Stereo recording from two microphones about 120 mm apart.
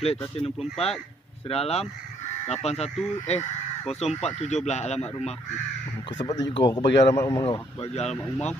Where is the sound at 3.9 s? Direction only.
65° left (ahead or behind).